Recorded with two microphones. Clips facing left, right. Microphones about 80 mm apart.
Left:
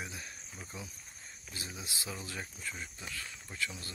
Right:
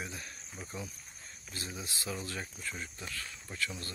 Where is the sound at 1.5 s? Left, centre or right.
Centre.